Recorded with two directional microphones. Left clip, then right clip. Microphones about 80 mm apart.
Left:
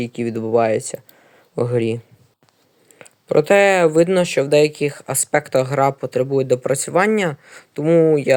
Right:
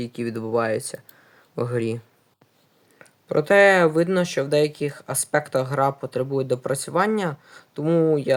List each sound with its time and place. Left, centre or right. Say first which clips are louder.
0.0 s speech: left 5 dB; centre
3.2 s speech: left 2 dB; centre
7.9 s speech: left 6 dB; centre